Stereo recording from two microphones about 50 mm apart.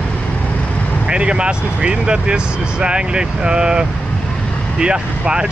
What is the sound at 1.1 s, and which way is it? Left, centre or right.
Speech, right.